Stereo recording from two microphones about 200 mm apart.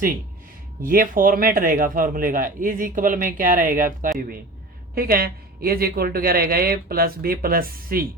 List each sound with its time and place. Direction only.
0.8 s a man's voice: 45° right (ahead or behind)